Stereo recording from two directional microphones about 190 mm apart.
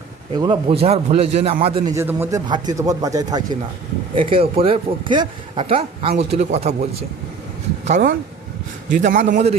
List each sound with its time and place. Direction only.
0.3 s a man's voice: 20° right (ahead or behind)
2.0 s speech: 10° right (ahead or behind); by 6.7 s 35° right (ahead or behind)
7.9 s a man's voice: 40° right (ahead or behind)